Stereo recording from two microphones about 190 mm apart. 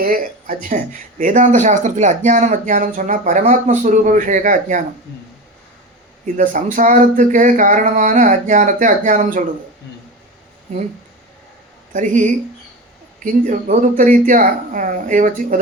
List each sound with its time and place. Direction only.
0.0 s speech: 45° right (ahead or behind)
6.2 s speech: 45° right (ahead or behind)
11.9 s speech: 40° right (ahead or behind)